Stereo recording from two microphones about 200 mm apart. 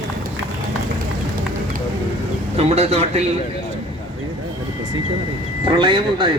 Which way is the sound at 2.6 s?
30° right (ahead or behind).